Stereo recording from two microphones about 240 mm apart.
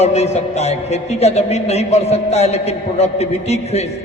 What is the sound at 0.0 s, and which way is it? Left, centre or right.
A man's voice, left.